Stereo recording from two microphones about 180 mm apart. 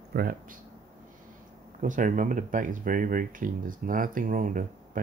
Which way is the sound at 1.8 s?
45° right (ahead or behind).